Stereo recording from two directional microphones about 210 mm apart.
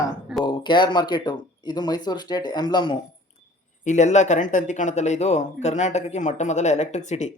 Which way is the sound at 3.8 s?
35° left (ahead or behind).